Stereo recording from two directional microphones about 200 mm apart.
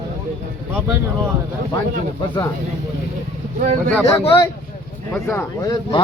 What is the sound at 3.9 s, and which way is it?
Speech, 5° left (ahead or behind).